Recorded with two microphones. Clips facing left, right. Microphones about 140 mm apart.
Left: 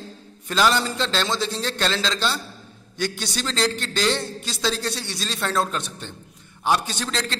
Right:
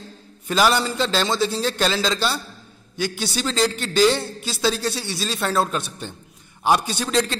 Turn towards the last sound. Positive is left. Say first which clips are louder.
# right 6 dB
turn(degrees=-10)  # may be behind; listen again after turning